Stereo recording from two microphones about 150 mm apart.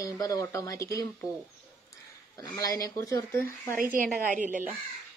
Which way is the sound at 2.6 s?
25° left (ahead or behind).